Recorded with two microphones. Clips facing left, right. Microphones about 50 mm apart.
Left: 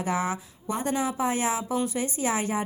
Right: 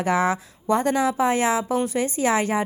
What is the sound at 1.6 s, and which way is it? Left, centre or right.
A woman's voice, right.